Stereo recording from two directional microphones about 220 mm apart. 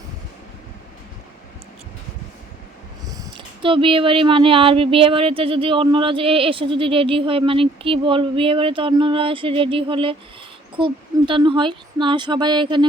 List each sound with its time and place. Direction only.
3.2 s speech: 20° right (ahead or behind)